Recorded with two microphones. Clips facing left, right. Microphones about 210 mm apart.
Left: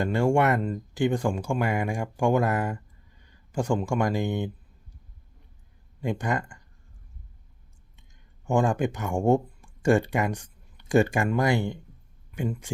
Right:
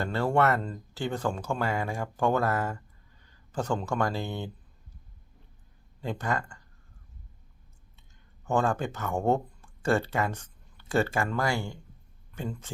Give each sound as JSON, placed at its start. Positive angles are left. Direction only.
{"t": 0.0, "sound": "speech", "side_deg": 15}
{"t": 6.0, "sound": "speech", "side_deg": 15}
{"t": 8.4, "sound": "speech", "side_deg": 15}